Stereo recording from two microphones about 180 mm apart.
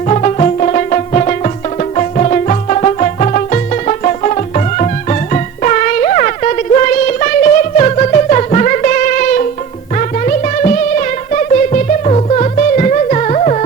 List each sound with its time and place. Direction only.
0.1 s music: 35° left (ahead or behind)